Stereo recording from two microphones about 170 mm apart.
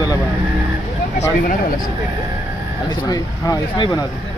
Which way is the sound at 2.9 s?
25° left (ahead or behind).